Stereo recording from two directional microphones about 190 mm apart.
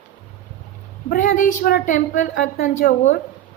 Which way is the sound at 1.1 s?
45° left (ahead or behind).